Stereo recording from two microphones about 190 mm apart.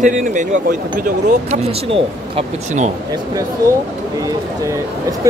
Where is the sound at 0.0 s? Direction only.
40° right (ahead or behind).